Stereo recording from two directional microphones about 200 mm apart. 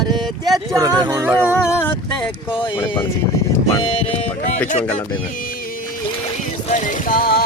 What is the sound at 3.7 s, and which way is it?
Music, 25° left (ahead or behind).